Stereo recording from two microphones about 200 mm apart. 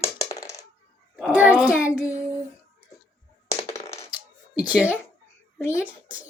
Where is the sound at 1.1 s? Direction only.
5° right (ahead or behind).